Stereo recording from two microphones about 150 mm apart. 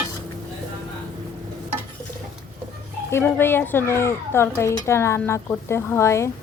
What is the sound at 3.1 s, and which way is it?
A child's voice, 15° left (ahead or behind).